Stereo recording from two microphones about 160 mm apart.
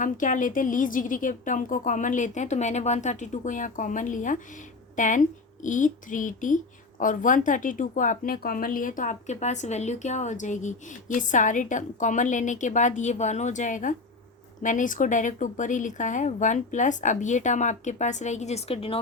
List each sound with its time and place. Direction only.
0.0 s speech: 55° left (ahead or behind); by 18.9 s 35° left (ahead or behind)